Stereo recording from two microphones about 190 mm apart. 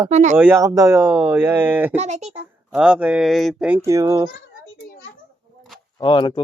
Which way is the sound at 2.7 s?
5° right (ahead or behind).